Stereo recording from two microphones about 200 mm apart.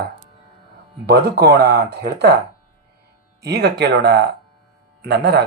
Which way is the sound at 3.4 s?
55° right (ahead or behind).